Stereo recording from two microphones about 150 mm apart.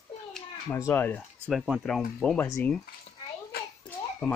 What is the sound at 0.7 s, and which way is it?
Speech, 15° left (ahead or behind).